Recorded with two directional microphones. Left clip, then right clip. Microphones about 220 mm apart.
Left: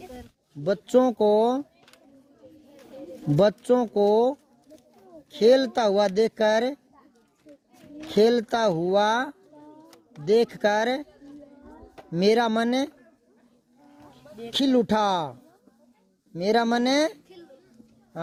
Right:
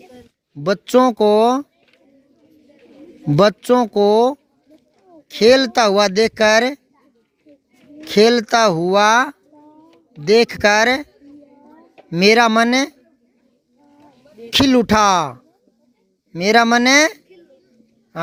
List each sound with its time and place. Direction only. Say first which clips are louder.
0.6 s speech: right 7 dB; 45° right (ahead or behind)
3.3 s speech: right 7 dB; 45° right (ahead or behind)
8.1 s speech: right 8 dB; 40° right (ahead or behind)
12.1 s speech: right 9 dB; 40° right (ahead or behind)
14.5 s speech: right 9 dB; 45° right (ahead or behind)